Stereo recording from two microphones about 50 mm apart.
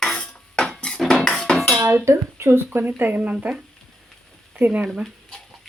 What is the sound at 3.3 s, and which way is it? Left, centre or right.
Speech, right.